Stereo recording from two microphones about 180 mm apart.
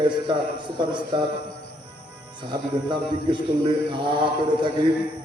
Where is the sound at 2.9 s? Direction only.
25° right (ahead or behind).